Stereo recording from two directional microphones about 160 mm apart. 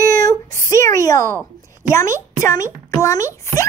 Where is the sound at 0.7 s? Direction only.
20° left (ahead or behind).